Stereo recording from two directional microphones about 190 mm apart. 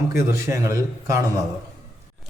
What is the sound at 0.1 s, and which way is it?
A man's voice, 15° right (ahead or behind).